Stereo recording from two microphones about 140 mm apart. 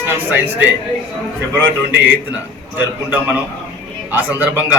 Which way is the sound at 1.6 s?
15° right (ahead or behind).